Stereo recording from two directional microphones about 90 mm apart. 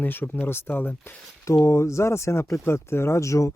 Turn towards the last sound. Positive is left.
turn(degrees=35)  # may be behind; listen again after turning